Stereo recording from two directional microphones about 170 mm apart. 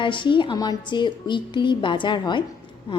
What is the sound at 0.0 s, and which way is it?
Speech, 30° left (ahead or behind).